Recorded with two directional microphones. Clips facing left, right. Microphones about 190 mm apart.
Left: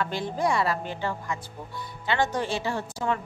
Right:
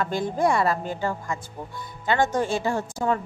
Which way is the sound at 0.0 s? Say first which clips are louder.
Right 4 dB; 45° right (ahead or behind).